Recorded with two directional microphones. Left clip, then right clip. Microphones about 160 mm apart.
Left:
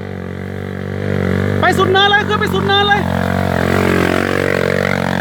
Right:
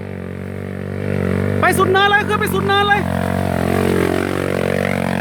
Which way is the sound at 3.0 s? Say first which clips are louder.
Left 3 dB; 5° left (ahead or behind).